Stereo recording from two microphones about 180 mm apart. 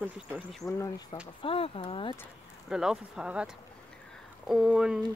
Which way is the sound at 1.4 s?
30° left (ahead or behind).